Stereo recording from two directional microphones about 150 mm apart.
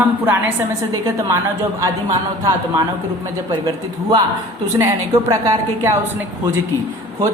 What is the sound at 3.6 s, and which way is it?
Speech, 30° right (ahead or behind).